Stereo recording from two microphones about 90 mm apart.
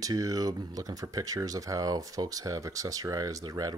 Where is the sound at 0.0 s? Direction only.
40° right (ahead or behind).